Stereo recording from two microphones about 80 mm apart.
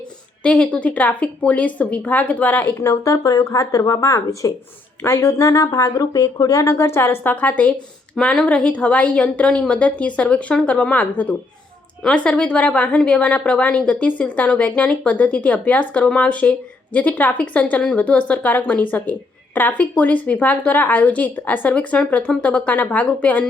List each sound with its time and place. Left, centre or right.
0.4 s a woman's voice: centre
2.7 s a woman's voice: left; by 23.5 s centre